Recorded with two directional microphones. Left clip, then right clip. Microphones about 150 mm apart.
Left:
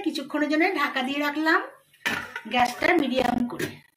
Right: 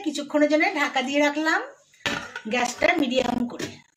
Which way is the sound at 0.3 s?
70° right (ahead or behind).